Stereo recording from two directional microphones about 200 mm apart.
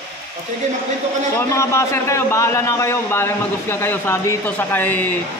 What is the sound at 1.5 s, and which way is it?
A man's voice, 15° left (ahead or behind).